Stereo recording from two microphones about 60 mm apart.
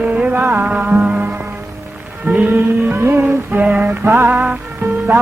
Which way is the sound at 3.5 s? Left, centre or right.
Right.